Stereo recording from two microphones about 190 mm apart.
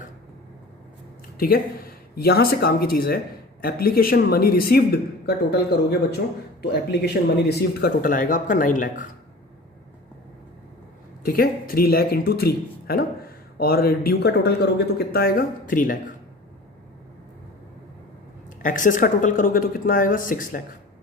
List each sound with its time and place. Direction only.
1.4 s speech: 50° left (ahead or behind)
11.2 s speech: 50° left (ahead or behind)
18.6 s speech: 45° left (ahead or behind)